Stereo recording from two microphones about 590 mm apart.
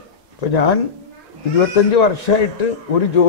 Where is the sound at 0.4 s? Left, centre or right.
Left.